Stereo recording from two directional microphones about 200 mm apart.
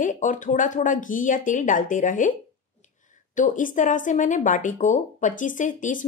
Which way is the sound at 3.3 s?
40° left (ahead or behind).